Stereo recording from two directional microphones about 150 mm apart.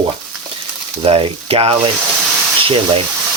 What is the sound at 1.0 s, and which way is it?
Speech, 40° right (ahead or behind).